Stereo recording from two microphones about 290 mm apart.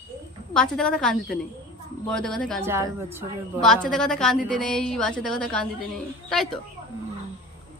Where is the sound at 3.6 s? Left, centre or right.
Centre.